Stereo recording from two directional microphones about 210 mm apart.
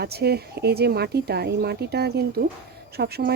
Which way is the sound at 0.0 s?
50° right (ahead or behind).